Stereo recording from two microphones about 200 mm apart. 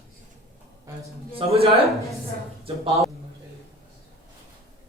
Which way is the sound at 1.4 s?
30° right (ahead or behind).